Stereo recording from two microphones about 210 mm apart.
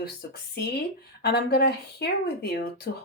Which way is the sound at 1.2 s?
50° left (ahead or behind).